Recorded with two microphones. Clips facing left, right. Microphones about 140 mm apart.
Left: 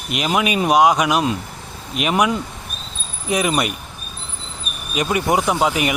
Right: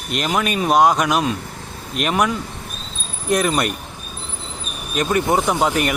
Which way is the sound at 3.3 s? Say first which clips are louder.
Right 1 dB; 10° left (ahead or behind).